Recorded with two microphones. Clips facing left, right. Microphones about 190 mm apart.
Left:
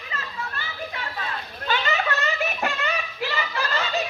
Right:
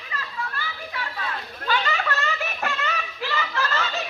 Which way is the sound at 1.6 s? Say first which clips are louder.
Left 1 dB; 20° left (ahead or behind).